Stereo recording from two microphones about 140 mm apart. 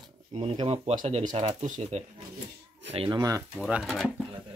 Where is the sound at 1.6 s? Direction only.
60° right (ahead or behind).